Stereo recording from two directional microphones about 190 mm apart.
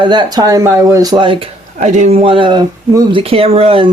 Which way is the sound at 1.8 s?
40° right (ahead or behind).